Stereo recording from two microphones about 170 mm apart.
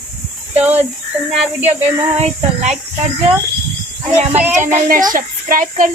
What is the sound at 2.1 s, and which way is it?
Speech, 40° right (ahead or behind).